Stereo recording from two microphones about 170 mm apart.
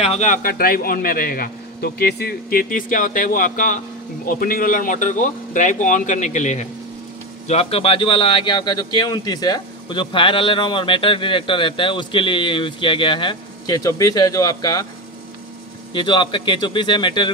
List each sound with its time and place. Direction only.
0.0 s a man's voice: 40° left (ahead or behind); by 14.9 s 25° left (ahead or behind)
15.9 s speech: 30° left (ahead or behind)